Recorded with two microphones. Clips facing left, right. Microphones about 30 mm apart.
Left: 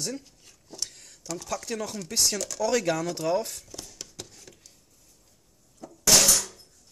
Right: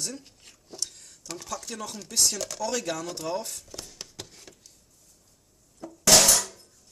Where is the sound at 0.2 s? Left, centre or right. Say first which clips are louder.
Right 2 dB; right.